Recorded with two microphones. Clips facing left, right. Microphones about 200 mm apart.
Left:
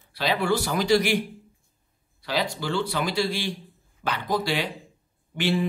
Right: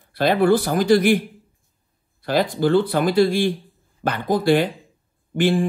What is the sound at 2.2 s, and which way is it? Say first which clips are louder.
Speech: right 9 dB; 50° right (ahead or behind).